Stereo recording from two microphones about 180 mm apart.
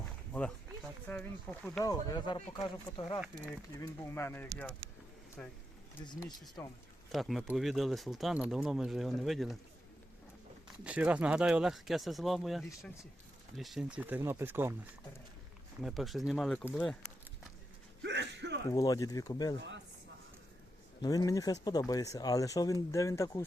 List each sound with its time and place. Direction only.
1.0 s speech: 10° left (ahead or behind)
1.8 s speech: 20° left (ahead or behind)
3.2 s speech: 5° right (ahead or behind)
3.8 s speech: 15° left (ahead or behind)
6.6 s speech: 15° left (ahead or behind)
7.1 s speech: centre (ahead or behind)
10.8 s speech: 5° right (ahead or behind)
15.8 s speech: centre (ahead or behind)
18.0 s a sound: 75° right (ahead or behind)
18.7 s speech: 20° left (ahead or behind)
19.5 s speech: 80° right
21.0 s speech: 20° left (ahead or behind)